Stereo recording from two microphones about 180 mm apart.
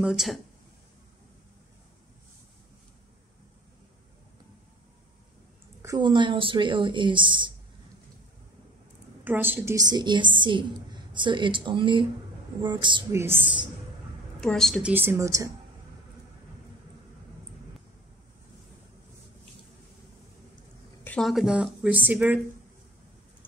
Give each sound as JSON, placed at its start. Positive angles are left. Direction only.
{"t": 0.0, "sound": "speech", "side_deg": -5}
{"t": 5.8, "sound": "a woman's voice", "side_deg": -20}
{"t": 9.2, "sound": "a woman's voice", "side_deg": -10}
{"t": 13.1, "sound": "a woman's voice", "side_deg": -15}
{"t": 14.4, "sound": "a woman's voice", "side_deg": 5}
{"t": 21.0, "sound": "speech", "side_deg": 5}